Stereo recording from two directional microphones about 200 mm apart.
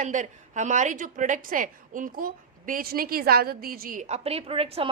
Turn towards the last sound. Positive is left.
turn(degrees=-30)  # may be behind; listen again after turning